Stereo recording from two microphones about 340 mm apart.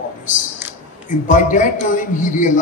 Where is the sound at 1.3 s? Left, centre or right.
Left.